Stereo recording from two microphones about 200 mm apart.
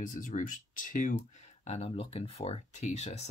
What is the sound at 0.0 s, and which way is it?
Speech, 40° left (ahead or behind).